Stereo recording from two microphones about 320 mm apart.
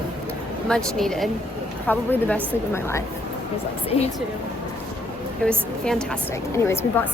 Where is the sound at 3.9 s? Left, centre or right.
Centre.